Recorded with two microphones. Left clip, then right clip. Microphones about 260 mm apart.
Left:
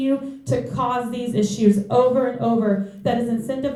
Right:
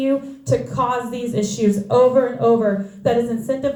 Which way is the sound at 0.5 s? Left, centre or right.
Right.